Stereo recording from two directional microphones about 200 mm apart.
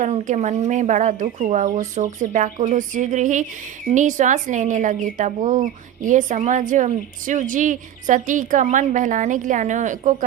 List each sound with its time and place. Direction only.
0.0 s speech: 35° right (ahead or behind)